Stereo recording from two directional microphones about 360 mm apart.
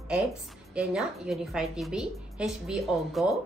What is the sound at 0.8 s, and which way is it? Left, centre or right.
A woman's voice, centre.